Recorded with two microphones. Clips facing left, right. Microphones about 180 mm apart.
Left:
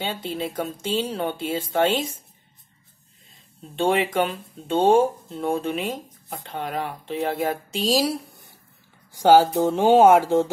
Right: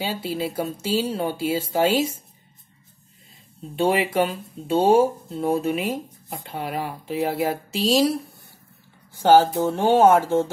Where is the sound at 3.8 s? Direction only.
10° right (ahead or behind).